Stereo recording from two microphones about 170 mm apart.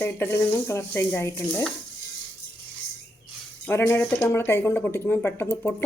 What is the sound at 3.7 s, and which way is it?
Speech, 15° left (ahead or behind).